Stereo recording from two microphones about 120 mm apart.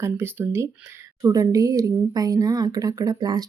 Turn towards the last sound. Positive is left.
turn(degrees=-35)  # may be behind; listen again after turning